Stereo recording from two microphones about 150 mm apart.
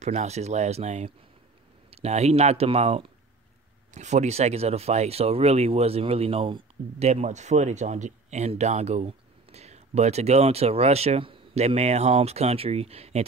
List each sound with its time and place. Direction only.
0.0 s speech: 50° right (ahead or behind)